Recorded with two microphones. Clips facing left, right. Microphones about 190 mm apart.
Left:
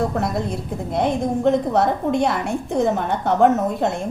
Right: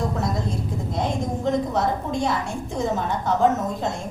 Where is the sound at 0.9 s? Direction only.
60° left (ahead or behind).